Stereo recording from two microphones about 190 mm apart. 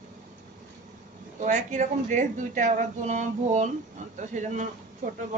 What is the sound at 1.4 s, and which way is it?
A woman's voice, 40° right (ahead or behind).